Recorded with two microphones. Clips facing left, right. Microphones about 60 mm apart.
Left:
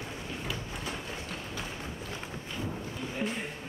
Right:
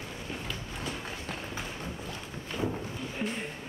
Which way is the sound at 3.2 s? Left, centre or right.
Centre.